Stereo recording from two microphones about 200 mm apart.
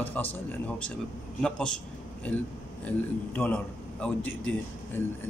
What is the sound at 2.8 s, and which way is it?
A man's voice, 10° left (ahead or behind).